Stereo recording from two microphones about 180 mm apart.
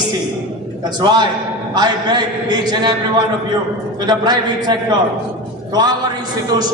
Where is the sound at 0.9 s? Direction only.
25° right (ahead or behind).